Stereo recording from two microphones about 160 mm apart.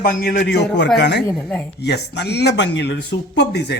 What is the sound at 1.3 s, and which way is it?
Speech, 5° left (ahead or behind).